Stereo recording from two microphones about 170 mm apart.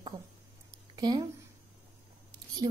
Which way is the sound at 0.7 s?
25° right (ahead or behind).